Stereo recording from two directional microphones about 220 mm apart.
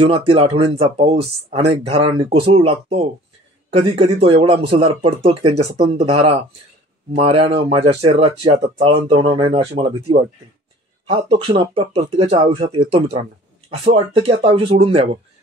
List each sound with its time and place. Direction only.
0.0 s speech: 25° right (ahead or behind)